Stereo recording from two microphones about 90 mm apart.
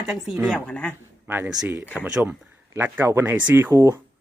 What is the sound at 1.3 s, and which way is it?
Speech, 25° right (ahead or behind).